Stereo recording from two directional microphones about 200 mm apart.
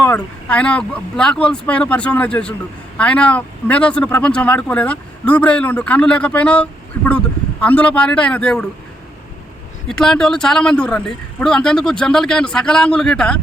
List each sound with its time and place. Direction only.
0.0 s speech: 5° left (ahead or behind)
10.0 s speech: 5° left (ahead or behind)